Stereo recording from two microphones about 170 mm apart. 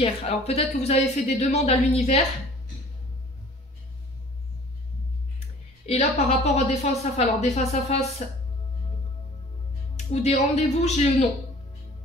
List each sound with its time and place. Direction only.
0.0 s speech: 35° left (ahead or behind)
5.9 s speech: 40° left (ahead or behind)
9.9 s speech: 40° left (ahead or behind)